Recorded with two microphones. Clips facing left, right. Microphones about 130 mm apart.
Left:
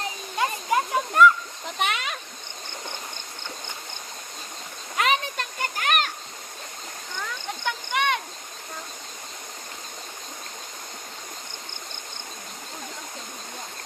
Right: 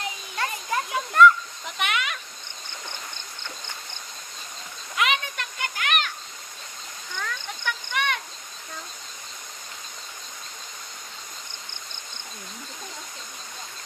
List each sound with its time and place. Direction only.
0.3 s a child's voice: 15° left (ahead or behind)
1.6 s goat: 40° left (ahead or behind)
4.9 s a sound: 40° left (ahead or behind)
7.2 s cricket: 20° left (ahead or behind)